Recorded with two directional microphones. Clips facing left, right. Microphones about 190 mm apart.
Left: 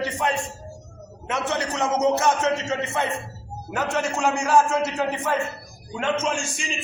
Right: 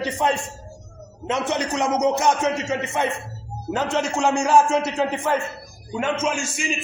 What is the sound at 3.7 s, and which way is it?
A man's voice, 25° right (ahead or behind).